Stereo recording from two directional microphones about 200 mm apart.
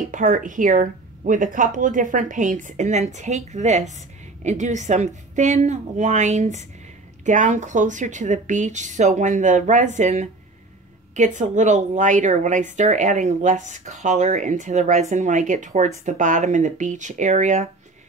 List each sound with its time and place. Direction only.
0.1 s a woman's voice: 40° right (ahead or behind)